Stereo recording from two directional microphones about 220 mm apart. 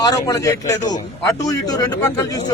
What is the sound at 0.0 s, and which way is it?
Speech, 15° left (ahead or behind).